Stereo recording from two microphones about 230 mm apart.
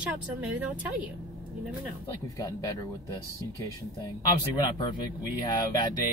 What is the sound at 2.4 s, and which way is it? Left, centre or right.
Speech, centre.